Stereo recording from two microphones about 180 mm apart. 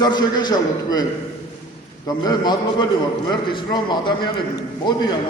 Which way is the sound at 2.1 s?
20° left (ahead or behind).